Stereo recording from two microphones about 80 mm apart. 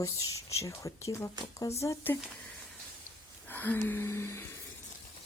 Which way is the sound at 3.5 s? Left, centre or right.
Left.